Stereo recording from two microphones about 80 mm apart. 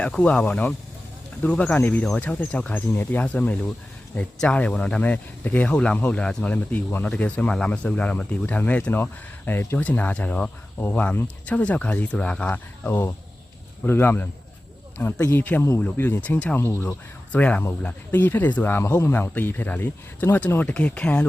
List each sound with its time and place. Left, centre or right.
0.0 s speech: centre
12.8 s speech: left
15.3 s speech: left
16.6 s speech: left
17.3 s speech: centre